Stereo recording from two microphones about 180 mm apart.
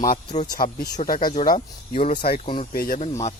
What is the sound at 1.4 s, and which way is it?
Speech, 35° left (ahead or behind).